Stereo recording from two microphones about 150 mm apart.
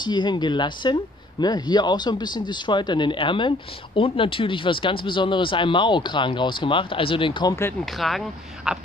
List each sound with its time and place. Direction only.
0.0 s speech: 30° left (ahead or behind)
7.8 s speech: centre (ahead or behind)